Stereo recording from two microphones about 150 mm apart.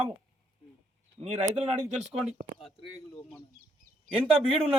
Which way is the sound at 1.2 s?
40° right (ahead or behind).